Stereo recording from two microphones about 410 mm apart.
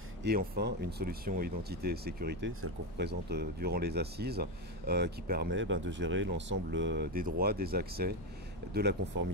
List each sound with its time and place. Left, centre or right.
0.2 s speech: right